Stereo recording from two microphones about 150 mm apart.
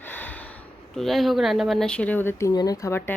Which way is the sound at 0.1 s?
10° left (ahead or behind).